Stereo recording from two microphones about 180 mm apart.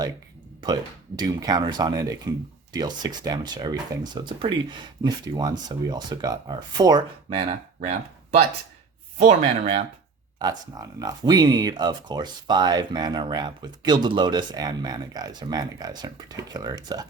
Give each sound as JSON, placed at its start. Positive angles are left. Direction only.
{"t": 0.6, "sound": "speech", "side_deg": -25}
{"t": 9.1, "sound": "speech", "side_deg": -40}
{"t": 10.8, "sound": "speech", "side_deg": -20}